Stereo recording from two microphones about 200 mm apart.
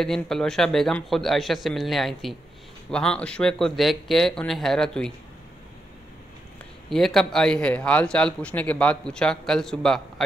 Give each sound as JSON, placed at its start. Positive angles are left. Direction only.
{"t": 0.0, "sound": "speech", "side_deg": 0}
{"t": 6.9, "sound": "speech", "side_deg": 0}